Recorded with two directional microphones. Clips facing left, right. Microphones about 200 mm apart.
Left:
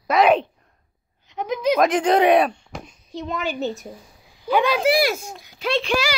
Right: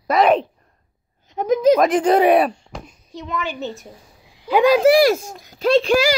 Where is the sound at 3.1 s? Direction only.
35° left (ahead or behind).